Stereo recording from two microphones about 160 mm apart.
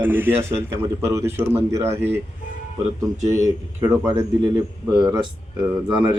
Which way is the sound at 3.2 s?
50° right (ahead or behind).